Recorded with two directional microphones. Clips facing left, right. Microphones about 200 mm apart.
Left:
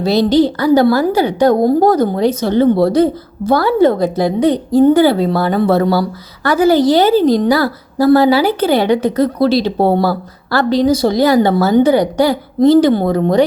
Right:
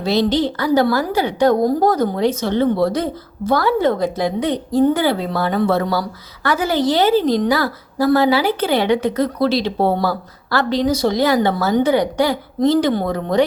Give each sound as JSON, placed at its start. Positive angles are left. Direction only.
{"t": 0.0, "sound": "a woman's voice", "side_deg": 35}